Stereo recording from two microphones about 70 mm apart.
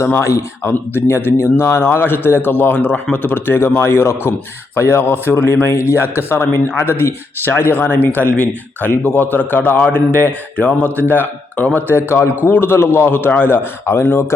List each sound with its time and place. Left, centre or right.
0.1 s speech: left
0.6 s a man's voice: left
12.0 s a man's voice: left
13.1 s a man's voice: left